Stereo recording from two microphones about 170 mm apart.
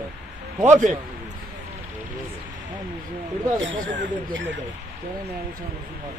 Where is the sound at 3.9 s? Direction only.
90° right.